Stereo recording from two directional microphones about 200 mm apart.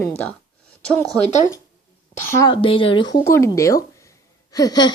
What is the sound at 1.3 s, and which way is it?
Speech, 35° left (ahead or behind).